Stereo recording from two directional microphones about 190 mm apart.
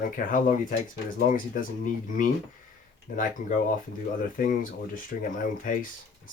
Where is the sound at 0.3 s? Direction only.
45° left (ahead or behind).